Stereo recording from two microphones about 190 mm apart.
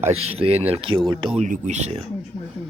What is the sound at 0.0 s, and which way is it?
Speech, 30° right (ahead or behind).